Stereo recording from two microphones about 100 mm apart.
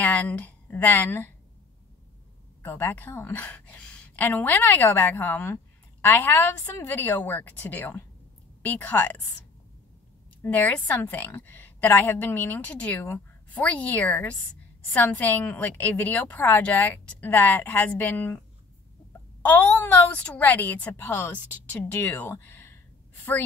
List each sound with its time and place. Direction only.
0.0 s a woman's voice: 15° left (ahead or behind)
2.6 s a woman's voice: 20° left (ahead or behind)
10.4 s a woman's voice: 15° left (ahead or behind)
19.4 s a woman's voice: 15° left (ahead or behind)
22.4 s a sound: 25° left (ahead or behind)